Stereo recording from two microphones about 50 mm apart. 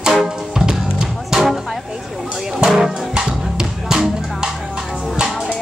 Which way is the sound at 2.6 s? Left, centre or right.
Centre.